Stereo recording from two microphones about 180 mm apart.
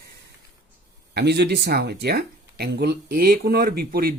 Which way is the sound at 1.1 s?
65° right (ahead or behind).